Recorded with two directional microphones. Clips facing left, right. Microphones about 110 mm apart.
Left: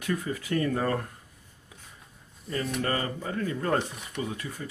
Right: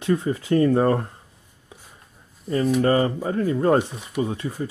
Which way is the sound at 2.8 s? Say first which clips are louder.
Right 10 dB; 30° right (ahead or behind).